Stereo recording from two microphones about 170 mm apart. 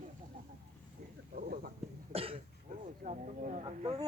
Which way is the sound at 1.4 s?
60° right (ahead or behind).